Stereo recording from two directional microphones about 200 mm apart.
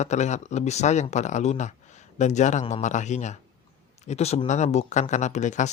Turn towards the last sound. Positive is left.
turn(degrees=35)  # may be behind; listen again after turning